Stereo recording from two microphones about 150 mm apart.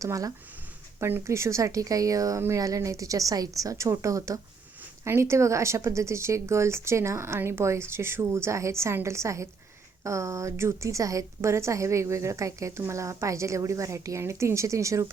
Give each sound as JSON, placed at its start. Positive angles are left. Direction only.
{"t": 0.0, "sound": "a woman's voice", "side_deg": -20}